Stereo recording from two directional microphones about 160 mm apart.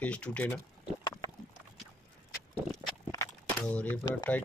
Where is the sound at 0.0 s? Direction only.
10° left (ahead or behind).